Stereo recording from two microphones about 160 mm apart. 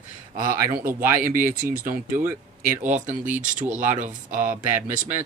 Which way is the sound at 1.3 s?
60° right (ahead or behind).